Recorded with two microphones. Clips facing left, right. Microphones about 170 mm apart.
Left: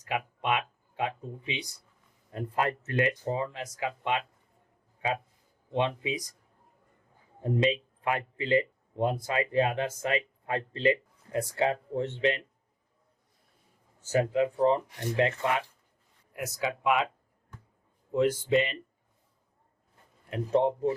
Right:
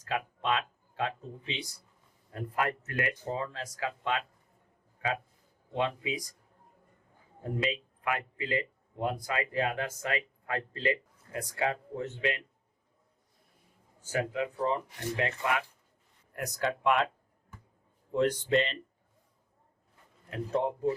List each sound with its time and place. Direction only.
0.0 s speech: 15° left (ahead or behind)
2.3 s speech: 25° left (ahead or behind)
5.7 s speech: 25° left (ahead or behind)
7.4 s speech: 25° left (ahead or behind)
14.0 s speech: 25° left (ahead or behind)
16.3 s speech: 5° left (ahead or behind)
18.1 s speech: 5° left (ahead or behind)
20.3 s speech: 25° left (ahead or behind)